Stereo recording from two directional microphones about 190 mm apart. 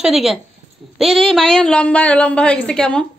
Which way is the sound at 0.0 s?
Centre (ahead or behind).